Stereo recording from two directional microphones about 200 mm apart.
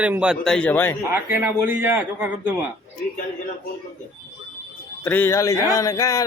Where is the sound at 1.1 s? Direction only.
10° right (ahead or behind).